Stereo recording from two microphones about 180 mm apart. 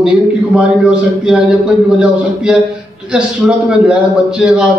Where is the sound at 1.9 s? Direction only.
5° right (ahead or behind).